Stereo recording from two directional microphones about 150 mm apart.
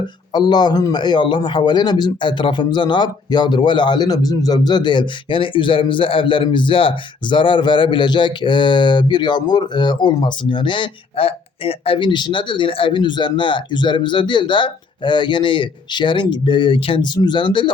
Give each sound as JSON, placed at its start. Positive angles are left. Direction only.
{"t": 0.3, "sound": "a man's voice", "side_deg": 30}